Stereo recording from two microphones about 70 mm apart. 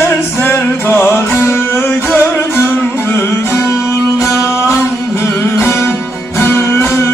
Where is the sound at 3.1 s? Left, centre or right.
Left.